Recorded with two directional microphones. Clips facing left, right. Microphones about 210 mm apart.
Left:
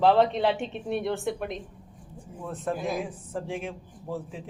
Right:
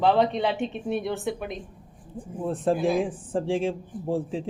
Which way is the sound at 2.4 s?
30° right (ahead or behind).